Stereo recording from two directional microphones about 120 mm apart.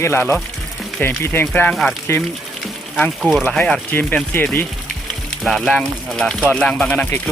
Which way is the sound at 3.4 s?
10° left (ahead or behind).